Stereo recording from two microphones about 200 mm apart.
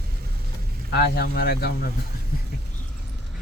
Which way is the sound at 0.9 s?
50° left (ahead or behind).